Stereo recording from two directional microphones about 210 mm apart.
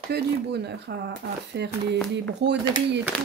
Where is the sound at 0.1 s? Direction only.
55° right (ahead or behind).